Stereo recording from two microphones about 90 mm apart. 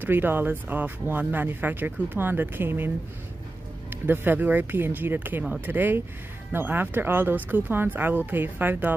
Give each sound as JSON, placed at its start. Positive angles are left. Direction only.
{"t": 0.0, "sound": "speech", "side_deg": -25}
{"t": 3.9, "sound": "speech", "side_deg": -20}